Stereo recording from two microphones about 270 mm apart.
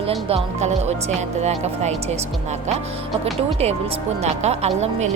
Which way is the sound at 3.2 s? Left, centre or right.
Right.